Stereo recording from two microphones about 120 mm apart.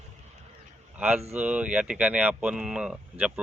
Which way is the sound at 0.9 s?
10° right (ahead or behind).